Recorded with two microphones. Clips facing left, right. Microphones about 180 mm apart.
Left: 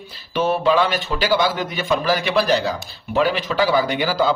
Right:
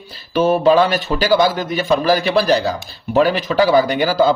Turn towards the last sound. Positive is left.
turn(degrees=-45)  # may be behind; listen again after turning